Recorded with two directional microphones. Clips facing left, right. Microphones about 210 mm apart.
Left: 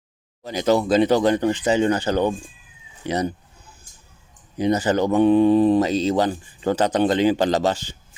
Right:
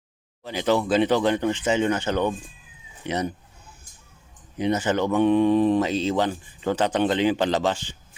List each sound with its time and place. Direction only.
0.4 s speech: 40° left (ahead or behind)
4.5 s speech: 35° left (ahead or behind)